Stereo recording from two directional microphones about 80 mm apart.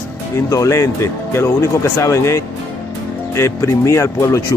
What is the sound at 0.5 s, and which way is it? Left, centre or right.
Speech, left.